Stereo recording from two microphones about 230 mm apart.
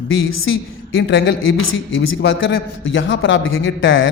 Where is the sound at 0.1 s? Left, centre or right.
Left.